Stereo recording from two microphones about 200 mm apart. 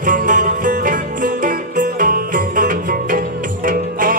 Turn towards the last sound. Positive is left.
turn(degrees=-45)  # may be behind; listen again after turning